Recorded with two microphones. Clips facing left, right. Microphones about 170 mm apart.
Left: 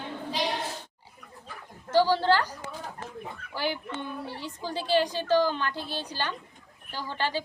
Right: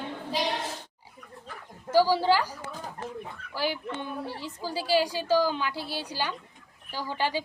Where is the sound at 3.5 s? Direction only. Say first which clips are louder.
Right 1 dB; centre (ahead or behind).